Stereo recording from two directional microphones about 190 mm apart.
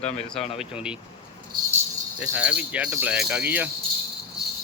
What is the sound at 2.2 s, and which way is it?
Speech, 5° right (ahead or behind).